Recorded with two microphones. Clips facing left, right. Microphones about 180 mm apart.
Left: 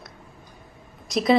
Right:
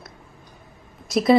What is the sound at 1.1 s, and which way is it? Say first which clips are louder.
Speech: right 3 dB; centre (ahead or behind).